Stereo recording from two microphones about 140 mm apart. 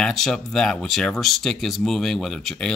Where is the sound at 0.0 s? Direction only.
5° left (ahead or behind).